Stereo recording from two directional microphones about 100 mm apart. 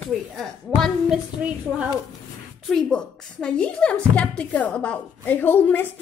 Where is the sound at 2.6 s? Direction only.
10° left (ahead or behind).